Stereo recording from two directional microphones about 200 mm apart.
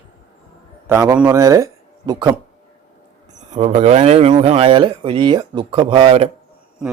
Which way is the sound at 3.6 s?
35° right (ahead or behind).